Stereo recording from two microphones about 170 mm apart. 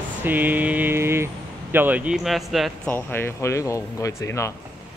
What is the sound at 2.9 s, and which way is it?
Speech, 15° left (ahead or behind).